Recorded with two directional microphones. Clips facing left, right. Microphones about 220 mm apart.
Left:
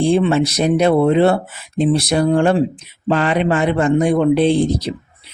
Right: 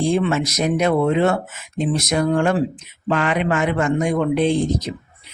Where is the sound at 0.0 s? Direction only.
30° left (ahead or behind).